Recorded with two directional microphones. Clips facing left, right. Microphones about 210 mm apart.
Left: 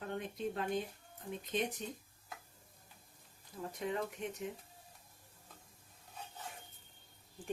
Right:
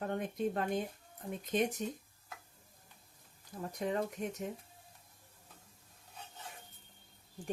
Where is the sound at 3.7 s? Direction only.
40° right (ahead or behind).